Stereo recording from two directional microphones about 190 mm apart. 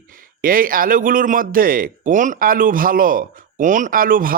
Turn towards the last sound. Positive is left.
turn(degrees=-45)  # may be behind; listen again after turning